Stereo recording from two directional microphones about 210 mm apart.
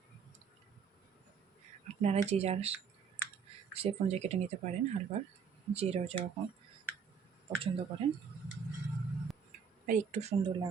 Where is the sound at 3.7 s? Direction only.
30° right (ahead or behind).